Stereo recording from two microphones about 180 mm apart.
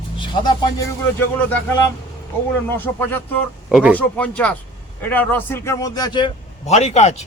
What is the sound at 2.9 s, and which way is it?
Speech, 10° left (ahead or behind).